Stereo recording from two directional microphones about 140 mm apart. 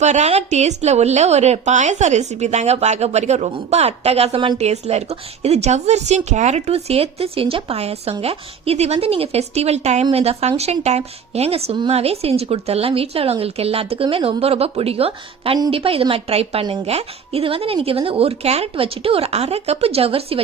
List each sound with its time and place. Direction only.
0.0 s a woman's voice: 55° right (ahead or behind)